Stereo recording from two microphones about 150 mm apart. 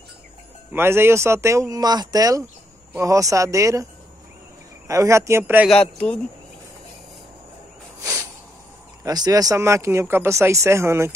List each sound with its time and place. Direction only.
0.7 s speech: 15° right (ahead or behind)
4.8 s speech: 20° right (ahead or behind)
8.0 s a sound: 20° right (ahead or behind)
9.0 s speech: 25° right (ahead or behind)